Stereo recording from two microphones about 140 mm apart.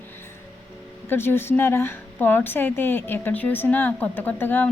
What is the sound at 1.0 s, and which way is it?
A woman's voice, 15° left (ahead or behind).